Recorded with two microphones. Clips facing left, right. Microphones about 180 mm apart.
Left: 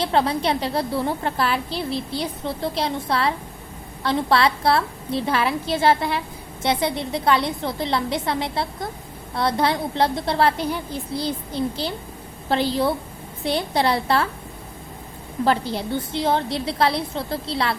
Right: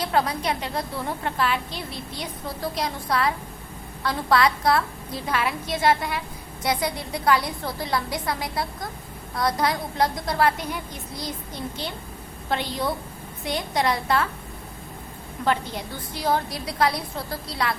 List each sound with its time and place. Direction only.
0.0 s a woman's voice: 30° left (ahead or behind)
15.4 s a woman's voice: 30° left (ahead or behind)